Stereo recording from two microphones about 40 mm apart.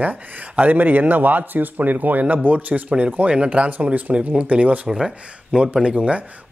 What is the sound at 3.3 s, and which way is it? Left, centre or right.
Speech, right.